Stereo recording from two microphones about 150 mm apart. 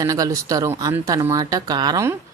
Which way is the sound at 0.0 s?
25° right (ahead or behind).